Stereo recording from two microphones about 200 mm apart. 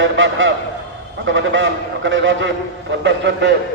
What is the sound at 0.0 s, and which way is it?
A man's voice, 70° right (ahead or behind).